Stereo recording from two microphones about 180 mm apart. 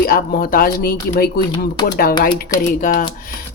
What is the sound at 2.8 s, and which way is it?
Speech, 50° left (ahead or behind).